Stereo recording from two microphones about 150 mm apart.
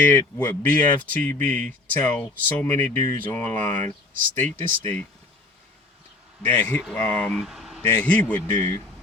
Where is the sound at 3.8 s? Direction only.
60° right (ahead or behind).